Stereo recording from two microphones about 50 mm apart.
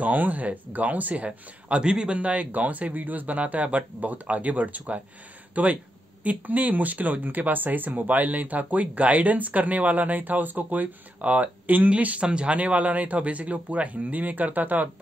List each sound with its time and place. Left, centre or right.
0.0 s speech: right